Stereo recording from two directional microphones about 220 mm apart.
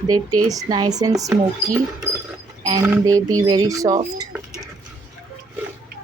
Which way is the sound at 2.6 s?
15° right (ahead or behind).